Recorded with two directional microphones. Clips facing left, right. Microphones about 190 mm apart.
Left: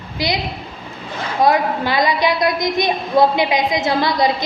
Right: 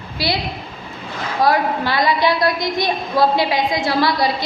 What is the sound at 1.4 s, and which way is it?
A woman's voice, 20° left (ahead or behind).